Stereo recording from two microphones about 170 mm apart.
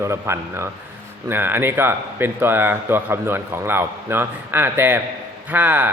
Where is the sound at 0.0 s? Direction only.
15° right (ahead or behind).